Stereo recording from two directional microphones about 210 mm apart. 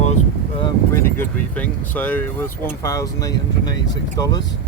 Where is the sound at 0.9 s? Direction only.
10° left (ahead or behind).